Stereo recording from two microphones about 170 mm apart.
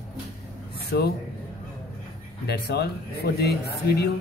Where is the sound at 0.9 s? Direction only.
70° left (ahead or behind).